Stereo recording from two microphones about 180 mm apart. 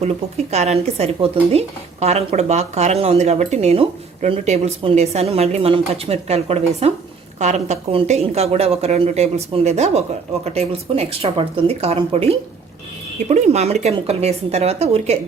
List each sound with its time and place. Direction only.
0.0 s speech: 35° right (ahead or behind)